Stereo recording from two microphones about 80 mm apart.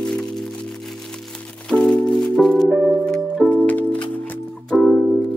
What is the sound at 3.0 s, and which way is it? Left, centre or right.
Music, centre.